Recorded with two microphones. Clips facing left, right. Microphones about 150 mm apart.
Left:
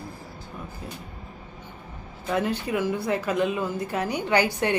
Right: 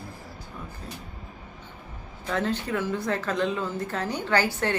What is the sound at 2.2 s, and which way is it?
A woman's voice, 10° left (ahead or behind).